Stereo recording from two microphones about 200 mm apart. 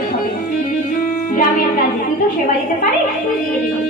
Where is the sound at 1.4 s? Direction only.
45° left (ahead or behind).